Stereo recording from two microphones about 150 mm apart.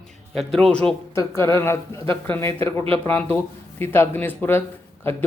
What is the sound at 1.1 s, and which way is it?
Speech, 15° left (ahead or behind).